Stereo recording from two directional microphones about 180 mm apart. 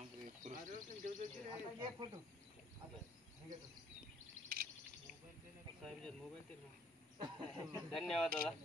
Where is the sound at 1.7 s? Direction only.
25° right (ahead or behind).